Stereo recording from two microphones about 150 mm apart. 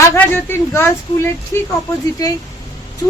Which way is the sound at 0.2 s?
15° left (ahead or behind).